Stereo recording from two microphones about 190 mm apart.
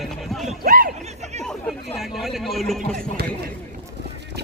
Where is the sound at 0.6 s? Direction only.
50° right (ahead or behind).